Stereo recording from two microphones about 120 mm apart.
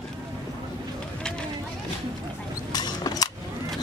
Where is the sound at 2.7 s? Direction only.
35° left (ahead or behind).